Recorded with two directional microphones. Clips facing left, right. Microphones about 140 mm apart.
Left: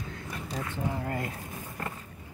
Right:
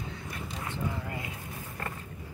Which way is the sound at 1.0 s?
45° left (ahead or behind).